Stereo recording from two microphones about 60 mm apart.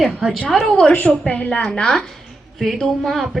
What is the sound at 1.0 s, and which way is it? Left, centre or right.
A woman's voice, left.